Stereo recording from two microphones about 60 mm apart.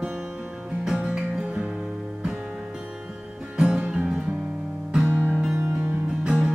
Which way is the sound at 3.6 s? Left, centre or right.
Centre.